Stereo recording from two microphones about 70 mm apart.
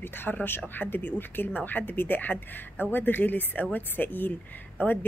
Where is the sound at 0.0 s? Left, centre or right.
Left.